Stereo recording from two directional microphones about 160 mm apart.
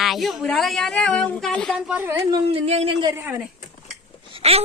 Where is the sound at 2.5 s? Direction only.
40° right (ahead or behind).